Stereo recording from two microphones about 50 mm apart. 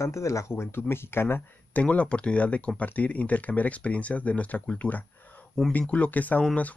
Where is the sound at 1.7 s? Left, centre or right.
Left.